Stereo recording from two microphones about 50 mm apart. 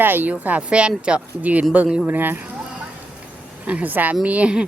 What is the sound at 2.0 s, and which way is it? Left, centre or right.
Speech, right.